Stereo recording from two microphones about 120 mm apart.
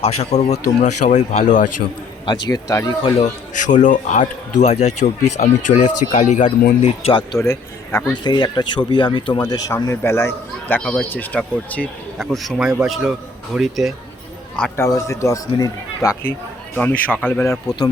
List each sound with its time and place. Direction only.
0.0 s speech: 60° left (ahead or behind); by 1.6 s 85° left
2.2 s speech: 35° left (ahead or behind)
3.5 s speech: 90° left; by 7.1 s 70° left (ahead or behind)
7.3 s speech: 20° left (ahead or behind)
8.2 s speech: 40° left (ahead or behind)
9.7 s speech: 20° left (ahead or behind)
10.8 s speech: 10° left (ahead or behind)
12.2 s speech: centre (ahead or behind)
14.8 s speech: 25° left (ahead or behind)
16.7 s speech: 10° left (ahead or behind)